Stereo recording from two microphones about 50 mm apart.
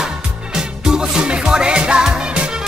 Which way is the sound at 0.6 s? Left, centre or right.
Centre.